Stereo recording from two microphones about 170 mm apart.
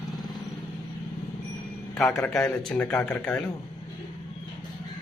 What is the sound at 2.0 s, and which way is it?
A man's voice, centre (ahead or behind).